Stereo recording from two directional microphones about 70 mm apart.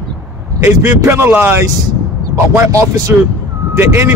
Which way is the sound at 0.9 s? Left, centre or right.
Right.